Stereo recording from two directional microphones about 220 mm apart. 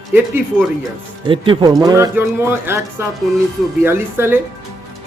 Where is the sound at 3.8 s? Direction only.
10° right (ahead or behind).